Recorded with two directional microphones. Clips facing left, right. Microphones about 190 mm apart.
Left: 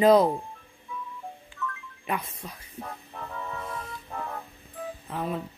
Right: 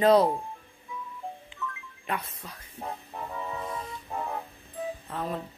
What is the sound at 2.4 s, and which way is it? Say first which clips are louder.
Speech: left 3 dB; 15° left (ahead or behind).